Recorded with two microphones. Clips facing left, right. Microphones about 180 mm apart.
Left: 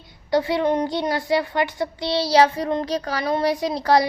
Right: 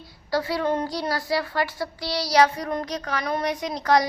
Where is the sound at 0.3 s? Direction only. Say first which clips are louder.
Left 4 dB; 20° left (ahead or behind).